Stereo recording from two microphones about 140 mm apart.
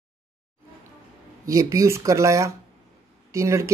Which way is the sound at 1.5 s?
25° right (ahead or behind).